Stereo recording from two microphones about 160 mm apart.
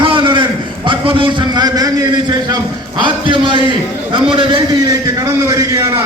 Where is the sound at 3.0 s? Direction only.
30° right (ahead or behind).